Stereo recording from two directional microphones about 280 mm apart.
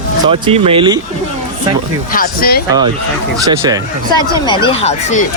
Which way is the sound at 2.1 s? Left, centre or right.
Left.